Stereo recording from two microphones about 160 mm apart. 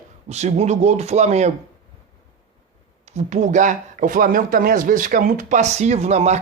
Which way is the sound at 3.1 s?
45° right (ahead or behind).